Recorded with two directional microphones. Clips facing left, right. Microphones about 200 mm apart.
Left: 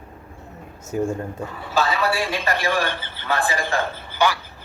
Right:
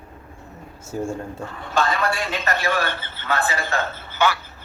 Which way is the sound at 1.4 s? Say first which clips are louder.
Even; 5° left (ahead or behind).